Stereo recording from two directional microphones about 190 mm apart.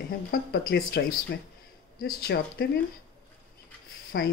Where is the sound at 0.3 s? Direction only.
55° left (ahead or behind).